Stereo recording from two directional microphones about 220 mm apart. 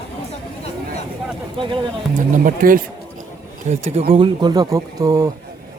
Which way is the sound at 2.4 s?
40° right (ahead or behind).